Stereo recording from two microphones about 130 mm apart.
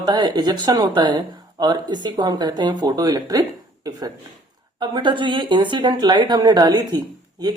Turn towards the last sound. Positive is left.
turn(degrees=-30)  # may be behind; listen again after turning